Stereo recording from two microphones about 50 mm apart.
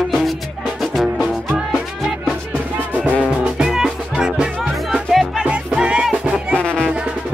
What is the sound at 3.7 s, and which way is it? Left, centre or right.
Music, centre.